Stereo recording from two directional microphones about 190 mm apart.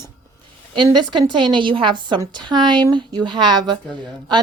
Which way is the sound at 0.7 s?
25° right (ahead or behind).